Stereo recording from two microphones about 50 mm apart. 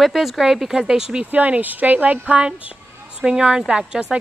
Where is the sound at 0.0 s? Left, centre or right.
Centre.